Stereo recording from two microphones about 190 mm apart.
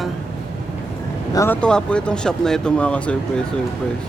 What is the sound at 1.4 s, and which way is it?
Speech, 10° left (ahead or behind).